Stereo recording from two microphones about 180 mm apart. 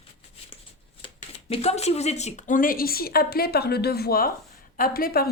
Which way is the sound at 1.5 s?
35° left (ahead or behind).